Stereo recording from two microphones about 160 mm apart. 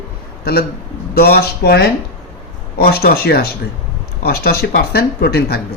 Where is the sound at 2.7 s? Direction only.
75° left (ahead or behind).